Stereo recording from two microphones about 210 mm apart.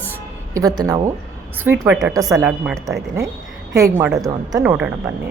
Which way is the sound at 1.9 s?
5° right (ahead or behind).